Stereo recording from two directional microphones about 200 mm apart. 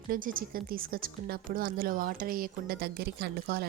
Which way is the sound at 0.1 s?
45° right (ahead or behind).